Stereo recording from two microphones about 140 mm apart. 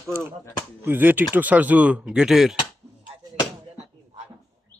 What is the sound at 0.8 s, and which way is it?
Speech, 15° right (ahead or behind).